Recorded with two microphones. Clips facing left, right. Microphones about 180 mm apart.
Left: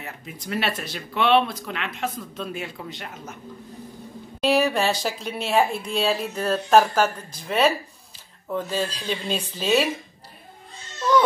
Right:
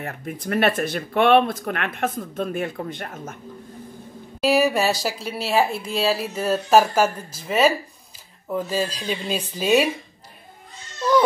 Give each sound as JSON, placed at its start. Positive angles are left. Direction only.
{"t": 0.0, "sound": "speech", "side_deg": -55}
{"t": 4.4, "sound": "speech", "side_deg": -5}